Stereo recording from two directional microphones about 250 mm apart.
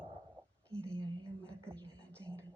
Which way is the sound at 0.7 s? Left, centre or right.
Centre.